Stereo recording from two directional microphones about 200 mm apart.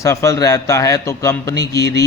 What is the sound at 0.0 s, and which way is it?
A man's voice, 15° left (ahead or behind).